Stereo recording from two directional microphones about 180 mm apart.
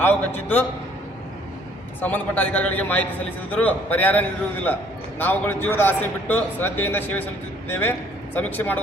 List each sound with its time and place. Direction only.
0.0 s a man's voice: 10° left (ahead or behind)
2.0 s a man's voice: 10° left (ahead or behind)